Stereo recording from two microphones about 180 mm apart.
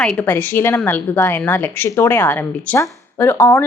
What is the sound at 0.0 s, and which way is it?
A woman's voice, 5° left (ahead or behind).